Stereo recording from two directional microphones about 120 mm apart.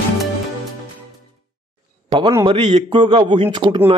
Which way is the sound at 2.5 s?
45° right (ahead or behind).